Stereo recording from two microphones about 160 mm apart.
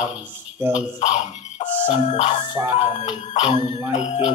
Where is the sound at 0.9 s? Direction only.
45° left (ahead or behind).